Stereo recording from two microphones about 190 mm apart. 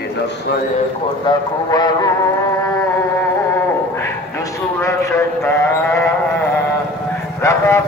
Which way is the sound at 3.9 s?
15° left (ahead or behind).